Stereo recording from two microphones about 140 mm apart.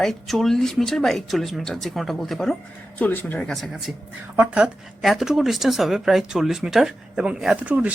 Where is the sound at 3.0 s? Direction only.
15° left (ahead or behind).